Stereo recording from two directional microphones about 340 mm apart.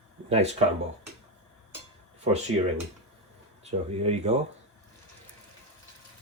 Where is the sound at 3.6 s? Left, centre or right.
Centre.